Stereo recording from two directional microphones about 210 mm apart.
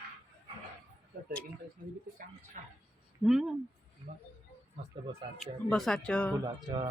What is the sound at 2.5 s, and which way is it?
Speech, 35° right (ahead or behind).